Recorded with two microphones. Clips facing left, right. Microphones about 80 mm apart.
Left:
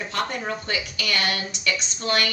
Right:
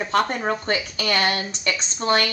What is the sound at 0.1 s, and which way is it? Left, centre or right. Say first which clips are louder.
A woman's voice: right 7 dB; right.